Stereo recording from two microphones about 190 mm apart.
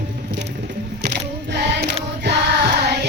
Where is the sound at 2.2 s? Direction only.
60° right (ahead or behind).